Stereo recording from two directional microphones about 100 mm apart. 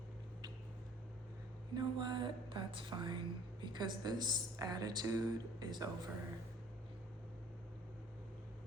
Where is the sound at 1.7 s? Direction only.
50° right (ahead or behind).